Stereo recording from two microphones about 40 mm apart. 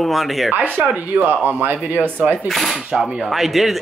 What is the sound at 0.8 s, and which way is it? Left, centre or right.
Speech, right.